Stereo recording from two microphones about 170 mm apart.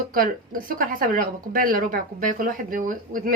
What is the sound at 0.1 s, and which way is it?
Speech, 55° right (ahead or behind).